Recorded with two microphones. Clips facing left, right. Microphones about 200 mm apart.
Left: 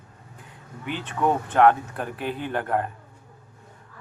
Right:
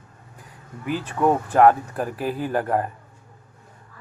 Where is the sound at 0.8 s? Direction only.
5° right (ahead or behind).